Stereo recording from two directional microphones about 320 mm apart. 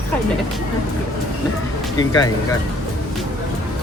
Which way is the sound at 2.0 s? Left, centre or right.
Centre.